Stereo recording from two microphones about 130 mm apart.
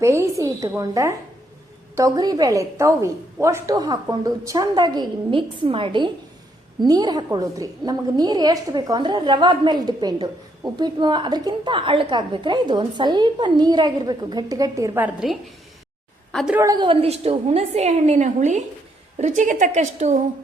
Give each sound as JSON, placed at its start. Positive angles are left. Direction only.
{"t": 0.0, "sound": "a woman's voice", "side_deg": -20}
{"t": 14.9, "sound": "a woman's voice", "side_deg": -10}
{"t": 16.6, "sound": "a woman's voice", "side_deg": -30}